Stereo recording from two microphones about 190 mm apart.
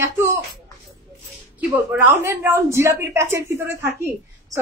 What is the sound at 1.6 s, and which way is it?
A woman's voice, 10° right (ahead or behind).